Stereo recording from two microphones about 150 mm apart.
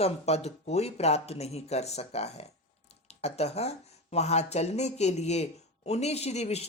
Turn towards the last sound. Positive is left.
turn(degrees=45)  # may be behind; listen again after turning